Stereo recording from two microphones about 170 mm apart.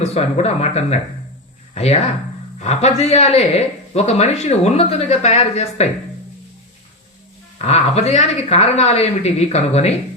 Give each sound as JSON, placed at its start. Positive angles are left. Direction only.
{"t": 0.0, "sound": "speech", "side_deg": 40}
{"t": 7.6, "sound": "speech", "side_deg": 40}